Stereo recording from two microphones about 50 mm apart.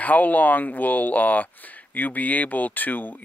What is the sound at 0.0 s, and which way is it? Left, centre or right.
Speech, left.